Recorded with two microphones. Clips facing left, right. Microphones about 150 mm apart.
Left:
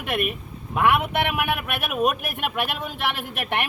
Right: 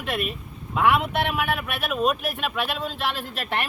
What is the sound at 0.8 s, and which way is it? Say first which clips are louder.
A man's voice: even; 15° left (ahead or behind).